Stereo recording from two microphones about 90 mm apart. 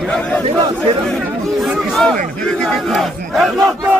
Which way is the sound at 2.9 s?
Centre (ahead or behind).